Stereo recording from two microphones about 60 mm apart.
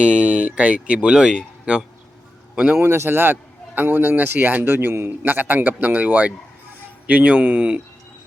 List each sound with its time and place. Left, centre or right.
0.0 s speech: right
2.7 s a man's voice: right